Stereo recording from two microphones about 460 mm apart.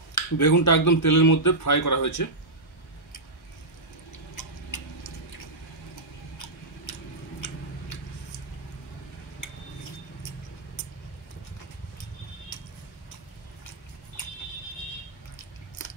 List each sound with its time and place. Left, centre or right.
0.1 s speech: left
4.4 s tick-tock: left
6.9 s a sound: left